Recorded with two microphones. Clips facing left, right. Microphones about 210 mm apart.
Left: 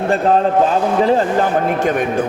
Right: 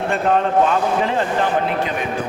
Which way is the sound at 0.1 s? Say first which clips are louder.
Left 4 dB; 35° left (ahead or behind).